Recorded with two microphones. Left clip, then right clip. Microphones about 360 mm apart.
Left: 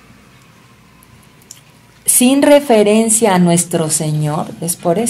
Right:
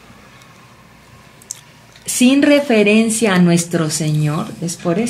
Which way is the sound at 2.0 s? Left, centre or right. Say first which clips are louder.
Left 3 dB; centre.